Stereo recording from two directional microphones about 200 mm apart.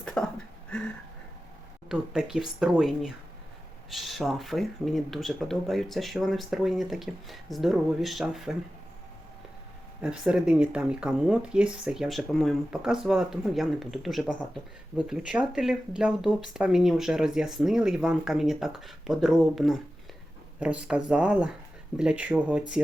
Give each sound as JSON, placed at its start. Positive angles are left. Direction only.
{"t": 0.0, "sound": "a sound", "side_deg": 5}
{"t": 1.9, "sound": "speech", "side_deg": -5}
{"t": 10.0, "sound": "speech", "side_deg": -5}